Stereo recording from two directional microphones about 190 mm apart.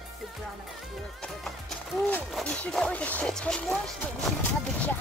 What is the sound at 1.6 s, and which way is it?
Music, 5° left (ahead or behind).